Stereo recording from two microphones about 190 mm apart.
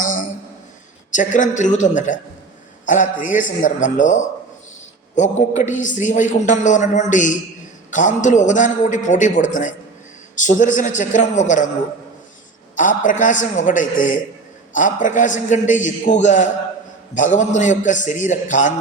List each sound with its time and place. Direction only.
0.0 s a sound: 45° left (ahead or behind)
1.1 s a man's voice: 40° left (ahead or behind)
12.7 s a man's voice: 40° left (ahead or behind)